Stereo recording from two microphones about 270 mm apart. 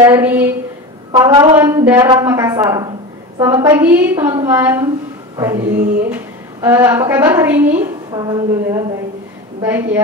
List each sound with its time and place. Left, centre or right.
0.0 s a woman's voice: centre
6.0 s a woman's voice: centre